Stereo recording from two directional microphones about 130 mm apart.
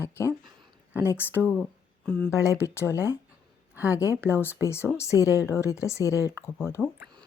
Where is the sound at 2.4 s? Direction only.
25° left (ahead or behind).